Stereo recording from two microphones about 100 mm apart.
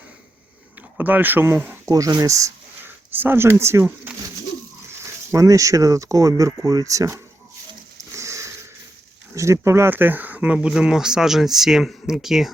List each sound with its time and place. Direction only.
0.8 s speech: 20° right (ahead or behind)
1.9 s speech: 35° right (ahead or behind)
2.8 s speech: 20° right (ahead or behind)
7.9 s sniff: 30° right (ahead or behind)
9.3 s speech: 30° right (ahead or behind); by 12.5 s 5° right (ahead or behind)